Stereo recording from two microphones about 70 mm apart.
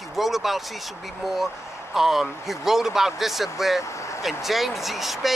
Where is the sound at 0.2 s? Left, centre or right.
Centre.